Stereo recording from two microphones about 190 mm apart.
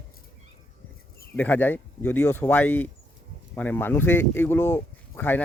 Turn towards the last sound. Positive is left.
turn(degrees=10)  # may be behind; listen again after turning